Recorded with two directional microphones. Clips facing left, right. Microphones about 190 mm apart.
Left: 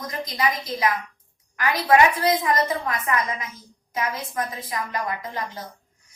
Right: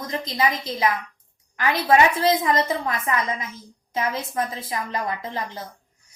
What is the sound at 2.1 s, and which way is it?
A woman's voice, 25° right (ahead or behind).